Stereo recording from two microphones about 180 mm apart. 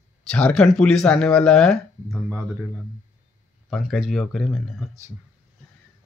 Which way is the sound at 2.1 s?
15° right (ahead or behind).